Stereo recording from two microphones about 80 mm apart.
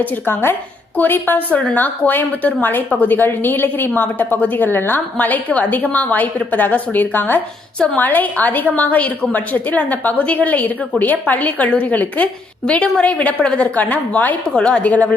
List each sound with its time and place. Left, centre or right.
0.0 s a woman's voice: left